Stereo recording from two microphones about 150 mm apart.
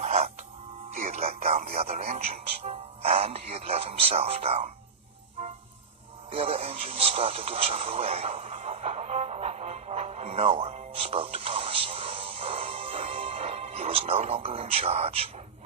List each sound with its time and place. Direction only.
0.0 s music: 45° right (ahead or behind)
0.9 s speech: 45° right (ahead or behind)
6.3 s radio: 40° right (ahead or behind)